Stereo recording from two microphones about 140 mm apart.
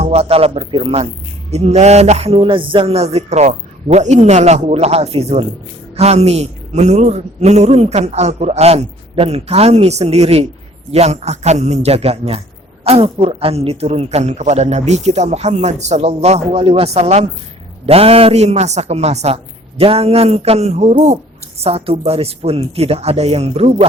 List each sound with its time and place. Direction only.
0.0 s a man's voice: 45° right (ahead or behind)